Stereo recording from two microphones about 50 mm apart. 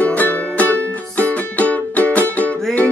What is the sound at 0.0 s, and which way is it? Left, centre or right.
Music, left.